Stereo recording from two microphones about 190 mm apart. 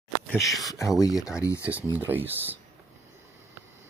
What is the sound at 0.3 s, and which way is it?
Speech, 15° left (ahead or behind).